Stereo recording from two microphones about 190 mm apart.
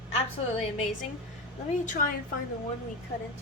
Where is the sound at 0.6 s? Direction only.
35° left (ahead or behind).